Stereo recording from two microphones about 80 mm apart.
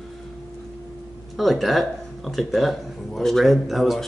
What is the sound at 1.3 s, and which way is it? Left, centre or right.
Speech, centre.